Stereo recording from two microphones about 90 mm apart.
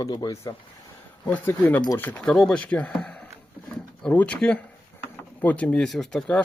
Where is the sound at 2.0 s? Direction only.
20° left (ahead or behind).